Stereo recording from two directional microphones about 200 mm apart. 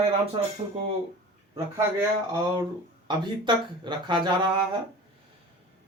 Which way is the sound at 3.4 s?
25° right (ahead or behind).